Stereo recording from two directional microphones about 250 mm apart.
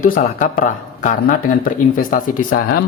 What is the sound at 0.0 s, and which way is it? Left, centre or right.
Speech, left.